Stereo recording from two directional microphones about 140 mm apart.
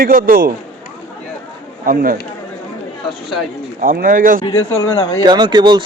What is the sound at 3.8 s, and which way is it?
Speech, 90° right.